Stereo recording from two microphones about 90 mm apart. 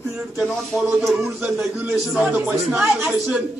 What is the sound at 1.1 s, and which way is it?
Speech, 10° right (ahead or behind).